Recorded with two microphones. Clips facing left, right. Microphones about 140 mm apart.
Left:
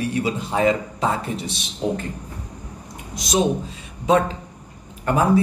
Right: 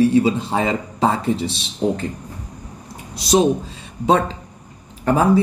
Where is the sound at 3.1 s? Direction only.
35° right (ahead or behind).